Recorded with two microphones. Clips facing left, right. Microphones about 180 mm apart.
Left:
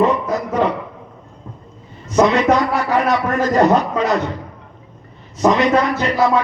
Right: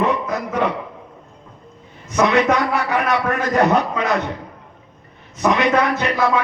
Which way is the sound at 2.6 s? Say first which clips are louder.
Left 3 dB; 60° right (ahead or behind).